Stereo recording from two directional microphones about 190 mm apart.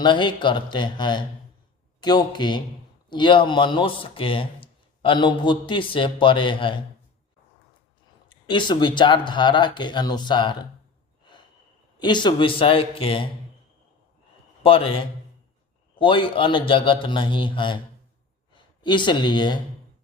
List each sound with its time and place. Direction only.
0.0 s speech: 25° left (ahead or behind)
8.3 s speech: 25° left (ahead or behind)
11.9 s speech: 25° left (ahead or behind)
14.6 s a man's voice: 30° left (ahead or behind)